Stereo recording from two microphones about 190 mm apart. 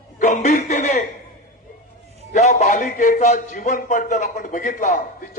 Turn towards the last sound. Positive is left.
turn(degrees=40)  # may be behind; listen again after turning